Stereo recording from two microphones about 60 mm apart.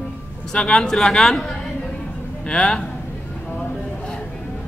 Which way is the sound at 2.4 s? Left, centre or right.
Centre.